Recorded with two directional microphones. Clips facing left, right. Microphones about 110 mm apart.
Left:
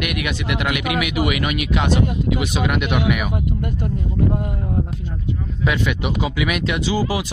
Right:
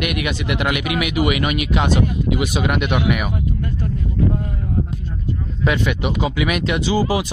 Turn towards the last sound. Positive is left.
turn(degrees=5)  # may be behind; listen again after turning